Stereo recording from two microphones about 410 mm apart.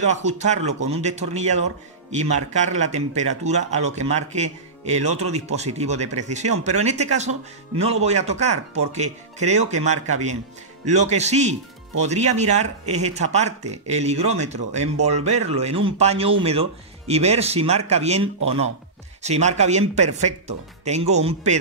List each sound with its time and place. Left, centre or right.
0.0 s a man's voice: centre